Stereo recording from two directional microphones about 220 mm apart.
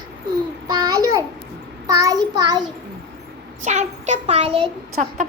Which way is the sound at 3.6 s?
30° right (ahead or behind).